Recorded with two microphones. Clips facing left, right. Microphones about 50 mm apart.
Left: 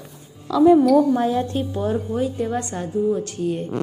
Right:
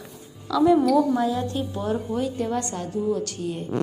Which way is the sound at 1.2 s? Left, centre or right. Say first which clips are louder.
Left 3 dB; left.